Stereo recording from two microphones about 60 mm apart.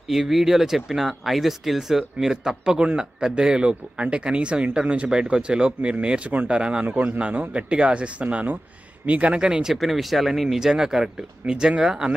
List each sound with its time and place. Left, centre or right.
0.1 s speech: centre
6.9 s a man's voice: right
7.2 s speech: right
9.8 s speech: centre